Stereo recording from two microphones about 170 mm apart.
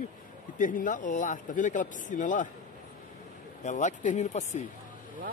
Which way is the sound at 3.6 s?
45° left (ahead or behind).